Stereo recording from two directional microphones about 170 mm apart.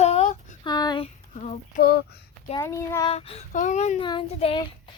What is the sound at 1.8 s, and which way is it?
Speech, 65° left (ahead or behind).